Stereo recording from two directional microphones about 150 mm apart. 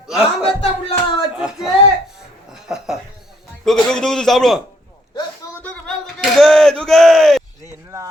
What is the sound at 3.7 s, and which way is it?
Speech, 5° left (ahead or behind).